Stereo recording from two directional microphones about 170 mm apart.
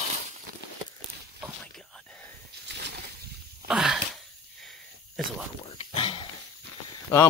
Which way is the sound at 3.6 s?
Centre (ahead or behind).